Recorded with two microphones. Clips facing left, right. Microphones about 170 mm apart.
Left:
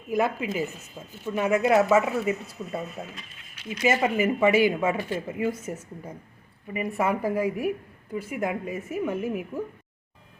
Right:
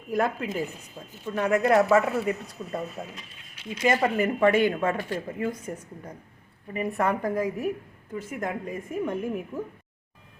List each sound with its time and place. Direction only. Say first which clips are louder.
0.1 s speech: left 1 dB; centre (ahead or behind)